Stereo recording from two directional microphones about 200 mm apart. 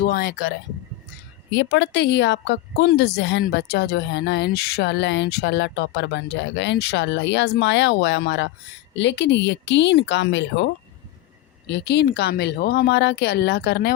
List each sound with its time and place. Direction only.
0.0 s speech: 45° left (ahead or behind)
1.5 s a woman's voice: 65° left (ahead or behind)
11.7 s a woman's voice: 60° left (ahead or behind)